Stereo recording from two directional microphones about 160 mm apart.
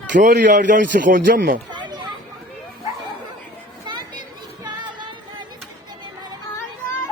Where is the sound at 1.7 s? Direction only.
30° right (ahead or behind).